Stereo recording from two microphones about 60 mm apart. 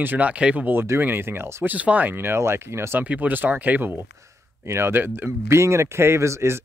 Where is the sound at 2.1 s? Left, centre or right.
Right.